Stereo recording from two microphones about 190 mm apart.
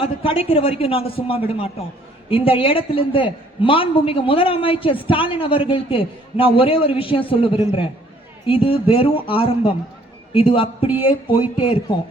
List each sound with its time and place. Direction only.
0.0 s a man's voice: 30° left (ahead or behind)